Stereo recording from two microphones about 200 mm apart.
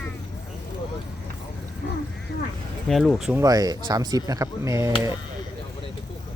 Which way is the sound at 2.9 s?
Centre (ahead or behind).